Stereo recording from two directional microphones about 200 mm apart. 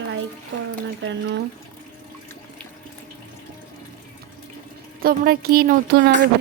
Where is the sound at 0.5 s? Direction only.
70° right (ahead or behind).